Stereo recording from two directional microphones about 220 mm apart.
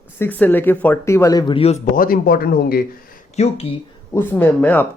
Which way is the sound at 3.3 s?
30° left (ahead or behind).